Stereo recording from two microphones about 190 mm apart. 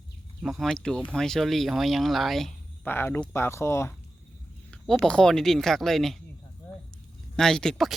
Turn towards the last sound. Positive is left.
turn(degrees=0)  # may be behind; listen again after turning